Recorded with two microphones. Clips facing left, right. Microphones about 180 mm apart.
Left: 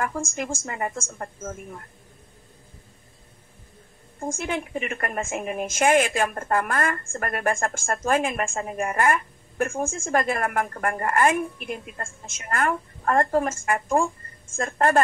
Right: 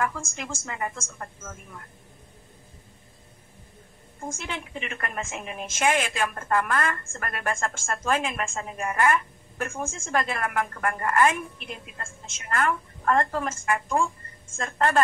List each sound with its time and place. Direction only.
0.0 s a woman's voice: 45° left (ahead or behind)
4.3 s a woman's voice: 50° left (ahead or behind)